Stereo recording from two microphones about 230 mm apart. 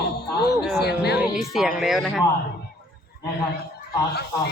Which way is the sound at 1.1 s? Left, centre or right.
Centre.